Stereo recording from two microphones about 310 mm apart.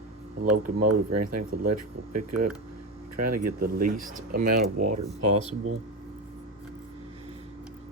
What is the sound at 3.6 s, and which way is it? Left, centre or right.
Speech, right.